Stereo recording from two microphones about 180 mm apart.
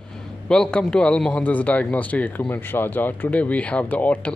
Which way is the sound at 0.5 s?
5° left (ahead or behind).